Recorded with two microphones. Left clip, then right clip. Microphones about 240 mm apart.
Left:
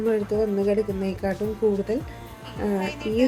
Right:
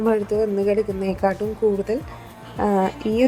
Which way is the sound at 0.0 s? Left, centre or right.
Centre.